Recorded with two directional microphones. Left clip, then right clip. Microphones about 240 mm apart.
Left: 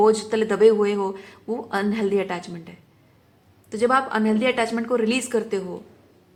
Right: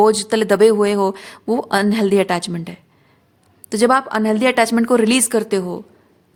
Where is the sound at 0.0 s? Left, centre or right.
Right.